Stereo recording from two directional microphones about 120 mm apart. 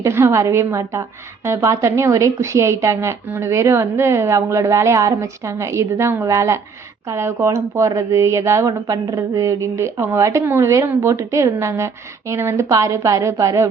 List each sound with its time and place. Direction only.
0.0 s a woman's voice: 20° right (ahead or behind)